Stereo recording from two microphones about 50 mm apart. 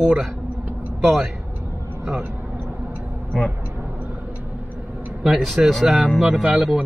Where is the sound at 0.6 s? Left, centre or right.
Right.